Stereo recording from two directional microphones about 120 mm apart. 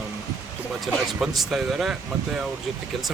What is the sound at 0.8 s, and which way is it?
Speech, centre (ahead or behind).